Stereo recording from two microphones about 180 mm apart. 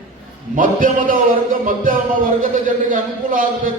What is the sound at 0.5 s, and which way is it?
A man's voice, 50° right (ahead or behind).